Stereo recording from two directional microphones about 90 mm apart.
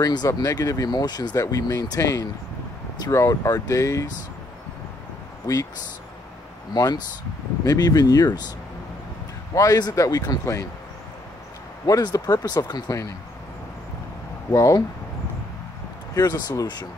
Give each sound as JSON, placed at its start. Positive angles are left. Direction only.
{"t": 0.0, "sound": "speech", "side_deg": 45}
{"t": 5.5, "sound": "speech", "side_deg": 40}
{"t": 6.7, "sound": "speech", "side_deg": 50}
{"t": 9.5, "sound": "speech", "side_deg": 40}
{"t": 11.8, "sound": "speech", "side_deg": 45}
{"t": 14.5, "sound": "speech", "side_deg": 40}
{"t": 16.2, "sound": "speech", "side_deg": 45}